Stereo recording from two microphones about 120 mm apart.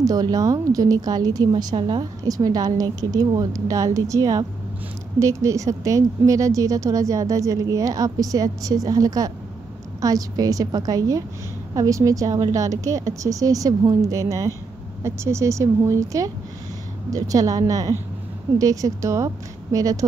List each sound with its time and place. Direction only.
0.0 s a woman's voice: 30° right (ahead or behind)